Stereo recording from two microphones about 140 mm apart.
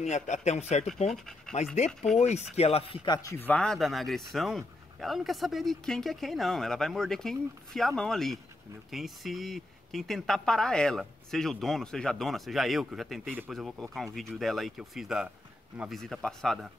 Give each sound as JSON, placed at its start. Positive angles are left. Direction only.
{"t": 0.0, "sound": "speech", "side_deg": 55}
{"t": 1.5, "sound": "speech", "side_deg": 5}
{"t": 2.1, "sound": "speech", "side_deg": 50}
{"t": 3.1, "sound": "speech", "side_deg": 20}